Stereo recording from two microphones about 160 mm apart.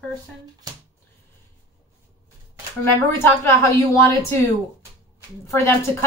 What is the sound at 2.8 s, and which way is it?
A woman's voice, 15° left (ahead or behind).